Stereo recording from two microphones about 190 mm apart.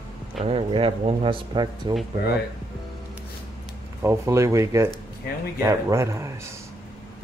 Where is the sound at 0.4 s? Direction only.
30° right (ahead or behind).